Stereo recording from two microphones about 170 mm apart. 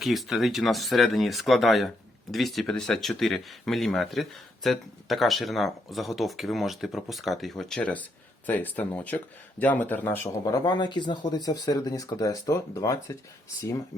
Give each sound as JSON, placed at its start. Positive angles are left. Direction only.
{"t": 0.0, "sound": "speech", "side_deg": 0}
{"t": 10.4, "sound": "speech", "side_deg": 25}